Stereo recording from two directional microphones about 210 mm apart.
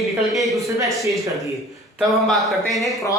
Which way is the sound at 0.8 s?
Centre (ahead or behind).